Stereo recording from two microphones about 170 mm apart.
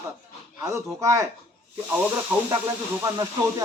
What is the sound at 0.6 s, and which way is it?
Speech, 20° right (ahead or behind).